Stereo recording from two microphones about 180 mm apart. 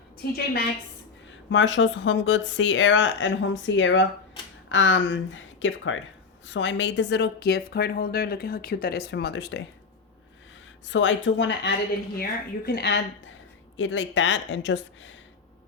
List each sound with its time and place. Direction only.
0.2 s a woman's voice: 60° left (ahead or behind)
1.5 s a woman's voice: 90° left
10.8 s speech: 90° left
12.2 s a woman's voice: 60° left (ahead or behind)
13.7 s speech: 90° left